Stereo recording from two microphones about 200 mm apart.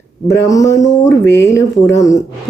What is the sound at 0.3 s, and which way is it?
Speech, 15° left (ahead or behind).